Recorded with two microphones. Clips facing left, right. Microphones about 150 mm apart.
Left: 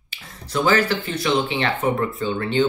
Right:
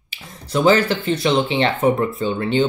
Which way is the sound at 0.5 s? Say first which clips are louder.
Right 4 dB; 20° right (ahead or behind).